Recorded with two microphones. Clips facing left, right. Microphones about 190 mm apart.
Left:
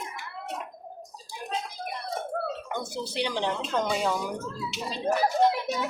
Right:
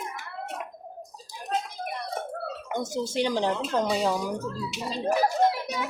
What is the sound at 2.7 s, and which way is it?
A woman's voice, 45° right (ahead or behind).